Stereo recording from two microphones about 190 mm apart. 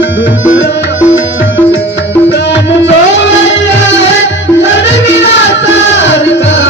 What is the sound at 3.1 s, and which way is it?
Music, 75° left (ahead or behind).